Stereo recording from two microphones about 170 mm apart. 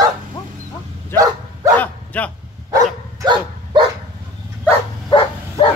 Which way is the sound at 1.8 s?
10° left (ahead or behind).